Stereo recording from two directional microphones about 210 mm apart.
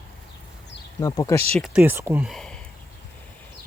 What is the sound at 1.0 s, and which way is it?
Speech, 15° left (ahead or behind).